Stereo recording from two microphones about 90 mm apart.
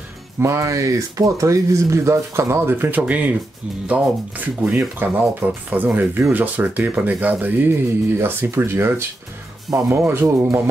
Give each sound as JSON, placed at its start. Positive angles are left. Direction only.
{"t": 0.4, "sound": "speech", "side_deg": -35}